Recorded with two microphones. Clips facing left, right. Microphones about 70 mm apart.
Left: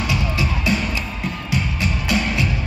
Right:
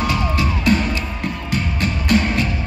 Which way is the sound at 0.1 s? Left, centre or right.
Right.